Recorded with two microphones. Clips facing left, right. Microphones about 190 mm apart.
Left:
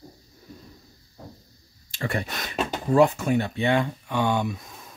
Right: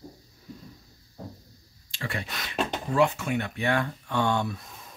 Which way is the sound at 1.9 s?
45° left (ahead or behind).